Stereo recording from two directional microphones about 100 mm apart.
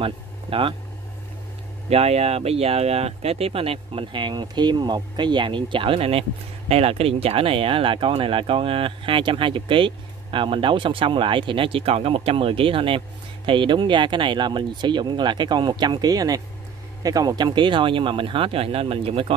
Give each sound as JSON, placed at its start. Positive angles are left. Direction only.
{"t": 0.0, "sound": "speech", "side_deg": -60}
{"t": 1.9, "sound": "speech", "side_deg": -90}
{"t": 6.7, "sound": "speech", "side_deg": -85}